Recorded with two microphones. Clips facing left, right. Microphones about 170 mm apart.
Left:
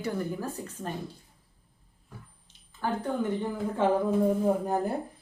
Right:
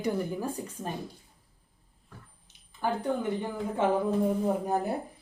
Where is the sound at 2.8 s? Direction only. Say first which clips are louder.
Right 1 dB; 15° right (ahead or behind).